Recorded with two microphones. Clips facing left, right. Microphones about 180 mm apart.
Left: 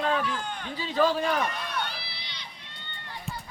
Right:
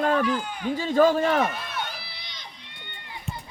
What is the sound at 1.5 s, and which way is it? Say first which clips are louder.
Run: right 1 dB; 5° right (ahead or behind).